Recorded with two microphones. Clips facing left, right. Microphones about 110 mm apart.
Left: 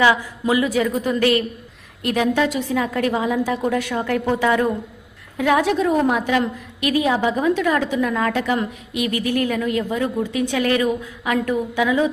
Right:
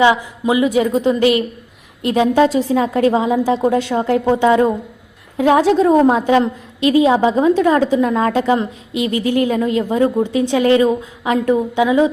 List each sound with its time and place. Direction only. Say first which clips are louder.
0.0 s a woman's voice: right 4 dB; 20° right (ahead or behind)